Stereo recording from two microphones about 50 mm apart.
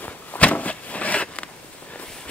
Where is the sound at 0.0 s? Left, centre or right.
Left.